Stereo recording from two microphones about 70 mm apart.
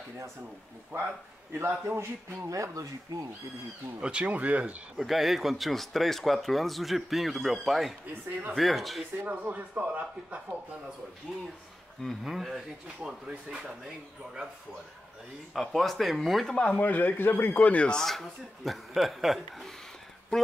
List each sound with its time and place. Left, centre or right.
0.9 s a man's voice: right
4.0 s a man's voice: centre
4.9 s speech: centre
8.1 s a man's voice: right
8.5 s speech: centre
9.2 s a man's voice: right
12.0 s speech: centre
15.5 s speech: centre
16.5 s speech: left; by 19.7 s centre